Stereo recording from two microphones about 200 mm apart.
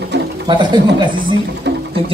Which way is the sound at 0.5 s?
20° right (ahead or behind).